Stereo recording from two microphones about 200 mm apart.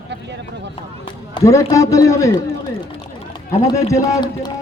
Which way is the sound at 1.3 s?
15° left (ahead or behind).